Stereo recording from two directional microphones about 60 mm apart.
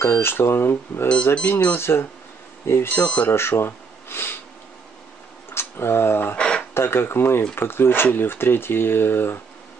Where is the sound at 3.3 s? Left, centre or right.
Left.